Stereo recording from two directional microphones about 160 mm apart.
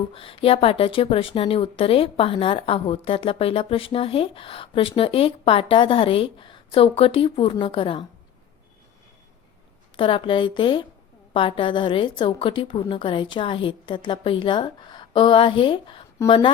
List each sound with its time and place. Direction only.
0.1 s a woman's voice: 35° left (ahead or behind)
10.0 s a woman's voice: 30° left (ahead or behind)